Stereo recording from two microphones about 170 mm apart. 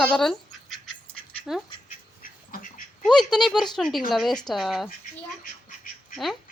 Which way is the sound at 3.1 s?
Centre (ahead or behind).